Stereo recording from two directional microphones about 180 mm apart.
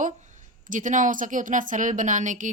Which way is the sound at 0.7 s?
45° right (ahead or behind).